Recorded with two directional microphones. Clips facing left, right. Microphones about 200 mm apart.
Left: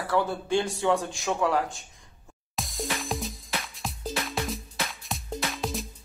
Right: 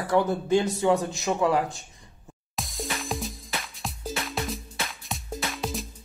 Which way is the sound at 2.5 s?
Centre (ahead or behind).